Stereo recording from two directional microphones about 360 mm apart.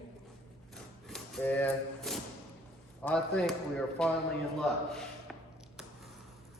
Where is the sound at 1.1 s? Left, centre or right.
Centre.